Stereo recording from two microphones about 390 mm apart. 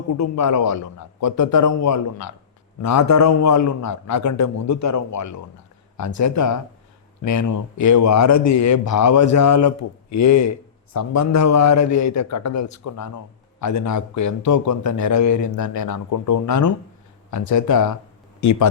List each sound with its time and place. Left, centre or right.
0.2 s a man's voice: left